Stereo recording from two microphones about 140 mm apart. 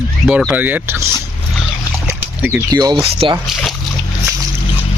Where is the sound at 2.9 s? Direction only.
40° right (ahead or behind).